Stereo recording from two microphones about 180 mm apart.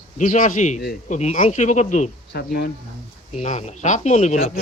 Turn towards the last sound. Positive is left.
turn(degrees=40)  # may be behind; listen again after turning